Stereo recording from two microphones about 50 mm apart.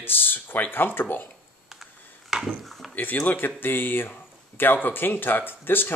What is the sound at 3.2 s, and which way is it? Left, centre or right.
Speech, left.